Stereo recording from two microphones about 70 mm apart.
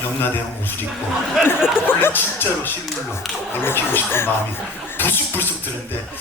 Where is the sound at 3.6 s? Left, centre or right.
Left.